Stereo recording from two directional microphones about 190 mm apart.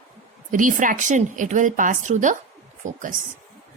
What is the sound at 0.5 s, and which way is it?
A woman's voice, 45° right (ahead or behind).